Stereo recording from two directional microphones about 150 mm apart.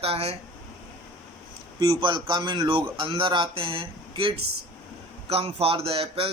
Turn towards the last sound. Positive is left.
turn(degrees=-40)  # may be behind; listen again after turning